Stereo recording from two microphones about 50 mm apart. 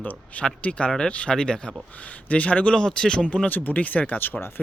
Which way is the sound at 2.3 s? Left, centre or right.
Left.